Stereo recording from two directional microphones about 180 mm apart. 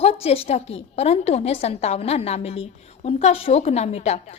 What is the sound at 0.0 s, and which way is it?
A woman's voice, 35° left (ahead or behind).